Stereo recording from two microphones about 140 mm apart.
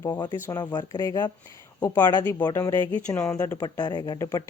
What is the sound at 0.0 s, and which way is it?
Speech, 25° left (ahead or behind).